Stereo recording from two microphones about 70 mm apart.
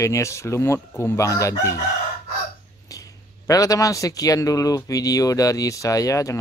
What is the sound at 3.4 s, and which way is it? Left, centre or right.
Speech, left.